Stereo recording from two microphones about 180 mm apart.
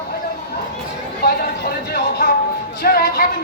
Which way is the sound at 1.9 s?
60° left (ahead or behind).